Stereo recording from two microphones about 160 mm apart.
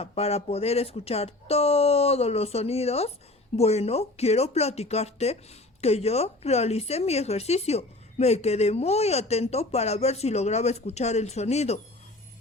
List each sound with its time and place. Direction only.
0.0 s a woman's voice: 40° left (ahead or behind)